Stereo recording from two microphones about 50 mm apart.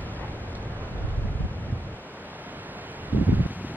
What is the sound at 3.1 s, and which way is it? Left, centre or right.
Rustling leaves, right.